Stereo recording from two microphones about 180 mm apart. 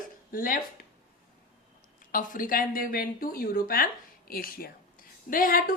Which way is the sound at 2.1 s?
50° left (ahead or behind).